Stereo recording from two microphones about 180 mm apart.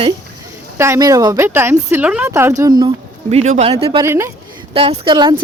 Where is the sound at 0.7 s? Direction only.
15° right (ahead or behind).